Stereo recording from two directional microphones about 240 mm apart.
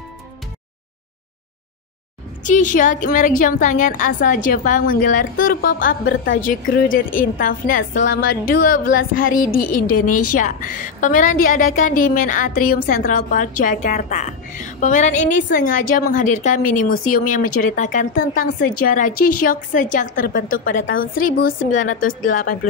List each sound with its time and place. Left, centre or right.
2.4 s a woman's voice: left
10.0 s a woman's voice: left
10.3 s a woman's voice: left